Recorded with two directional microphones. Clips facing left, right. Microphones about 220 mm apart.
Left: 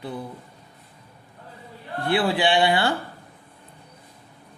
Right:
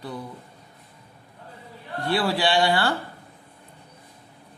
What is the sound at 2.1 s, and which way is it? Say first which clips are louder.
Speech: left 2 dB; 20° left (ahead or behind).